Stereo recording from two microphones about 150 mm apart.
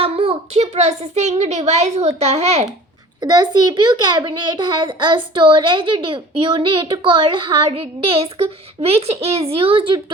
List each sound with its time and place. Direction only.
0.0 s a child's voice: 40° right (ahead or behind)
3.2 s a child's voice: 25° right (ahead or behind)